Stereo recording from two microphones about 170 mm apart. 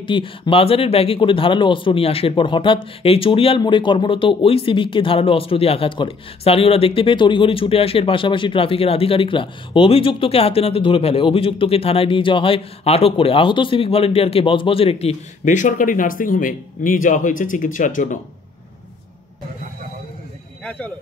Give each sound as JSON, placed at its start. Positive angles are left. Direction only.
{"t": 0.0, "sound": "speech", "side_deg": 30}